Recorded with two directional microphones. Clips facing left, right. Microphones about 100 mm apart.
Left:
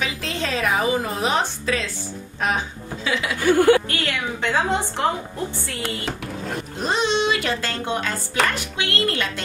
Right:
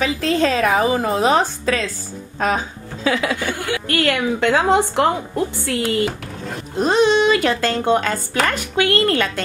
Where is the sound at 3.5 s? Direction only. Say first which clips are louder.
Left 10 dB; 45° left (ahead or behind).